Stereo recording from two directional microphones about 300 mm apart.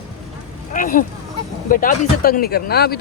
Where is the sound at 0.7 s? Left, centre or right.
Left.